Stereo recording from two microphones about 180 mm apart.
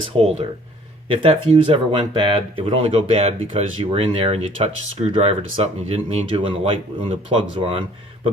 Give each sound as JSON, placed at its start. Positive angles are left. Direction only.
{"t": 0.1, "sound": "speech", "side_deg": -30}